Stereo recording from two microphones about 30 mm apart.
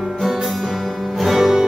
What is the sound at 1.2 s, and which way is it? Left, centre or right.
Music, centre.